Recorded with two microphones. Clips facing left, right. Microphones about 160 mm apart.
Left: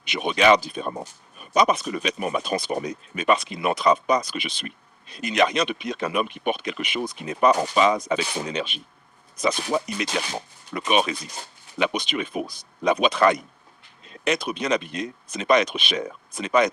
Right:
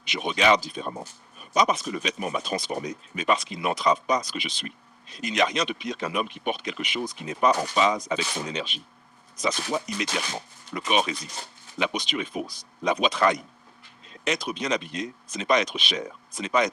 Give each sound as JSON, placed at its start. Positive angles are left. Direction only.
{"t": 0.0, "sound": "speech", "side_deg": 60}